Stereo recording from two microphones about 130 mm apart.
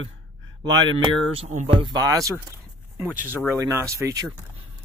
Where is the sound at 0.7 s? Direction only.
35° right (ahead or behind).